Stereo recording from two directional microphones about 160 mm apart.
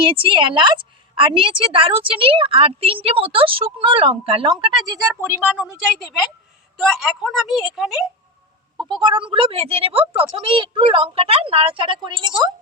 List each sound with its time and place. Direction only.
0.0 s a woman's voice: 35° right (ahead or behind)
4.9 s a woman's voice: 20° right (ahead or behind); by 8.0 s centre (ahead or behind)
8.9 s a woman's voice: 30° right (ahead or behind)